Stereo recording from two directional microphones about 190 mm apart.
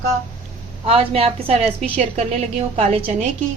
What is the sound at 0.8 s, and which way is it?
Speech, 30° right (ahead or behind).